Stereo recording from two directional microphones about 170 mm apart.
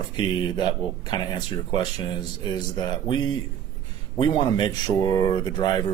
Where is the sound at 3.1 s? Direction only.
25° left (ahead or behind).